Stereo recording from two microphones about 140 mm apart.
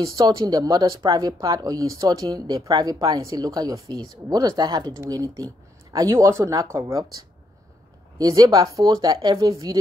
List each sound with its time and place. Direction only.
0.0 s speech: 25° right (ahead or behind)
8.2 s speech: 25° right (ahead or behind)